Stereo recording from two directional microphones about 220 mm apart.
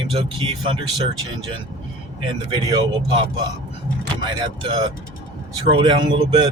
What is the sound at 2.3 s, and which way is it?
Speech, 20° right (ahead or behind).